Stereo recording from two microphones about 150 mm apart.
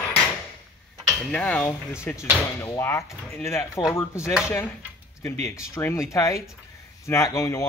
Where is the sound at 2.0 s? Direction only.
15° left (ahead or behind).